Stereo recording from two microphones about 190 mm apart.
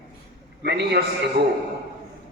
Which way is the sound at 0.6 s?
60° right (ahead or behind).